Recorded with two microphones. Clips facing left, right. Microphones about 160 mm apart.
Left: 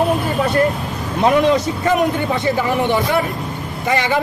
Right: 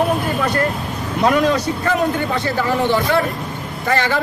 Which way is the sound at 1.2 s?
20° left (ahead or behind).